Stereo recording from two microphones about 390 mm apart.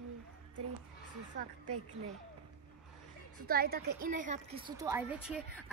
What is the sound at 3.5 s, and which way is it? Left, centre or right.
A woman's voice, right.